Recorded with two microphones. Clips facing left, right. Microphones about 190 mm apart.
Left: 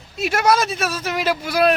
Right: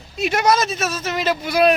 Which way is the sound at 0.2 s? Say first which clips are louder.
Even; 5° left (ahead or behind).